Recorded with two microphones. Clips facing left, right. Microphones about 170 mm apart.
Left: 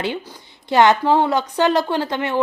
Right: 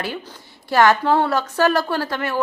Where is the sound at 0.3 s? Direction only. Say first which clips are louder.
Left 2 dB; 20° left (ahead or behind).